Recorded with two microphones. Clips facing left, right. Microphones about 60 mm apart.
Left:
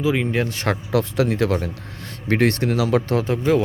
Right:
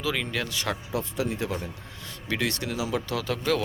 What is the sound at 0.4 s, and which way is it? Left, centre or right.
Speech, left.